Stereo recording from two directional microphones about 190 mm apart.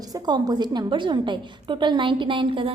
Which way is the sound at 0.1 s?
20° right (ahead or behind).